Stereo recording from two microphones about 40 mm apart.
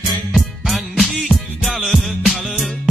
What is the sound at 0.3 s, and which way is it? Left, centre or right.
Music, centre.